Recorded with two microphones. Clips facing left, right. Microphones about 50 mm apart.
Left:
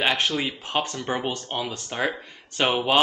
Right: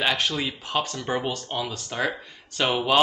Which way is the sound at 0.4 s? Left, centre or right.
Centre.